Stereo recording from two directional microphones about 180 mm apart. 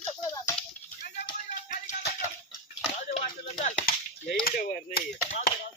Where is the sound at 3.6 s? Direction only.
40° left (ahead or behind).